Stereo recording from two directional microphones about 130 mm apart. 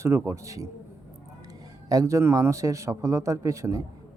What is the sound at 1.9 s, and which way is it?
A man's voice, 25° right (ahead or behind).